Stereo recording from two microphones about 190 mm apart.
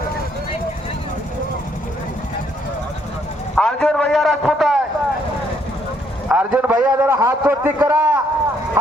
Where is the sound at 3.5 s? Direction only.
5° left (ahead or behind).